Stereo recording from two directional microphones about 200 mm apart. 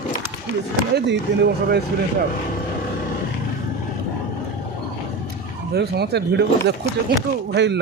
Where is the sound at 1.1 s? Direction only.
55° right (ahead or behind).